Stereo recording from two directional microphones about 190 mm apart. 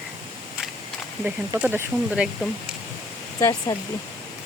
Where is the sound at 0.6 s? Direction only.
5° right (ahead or behind).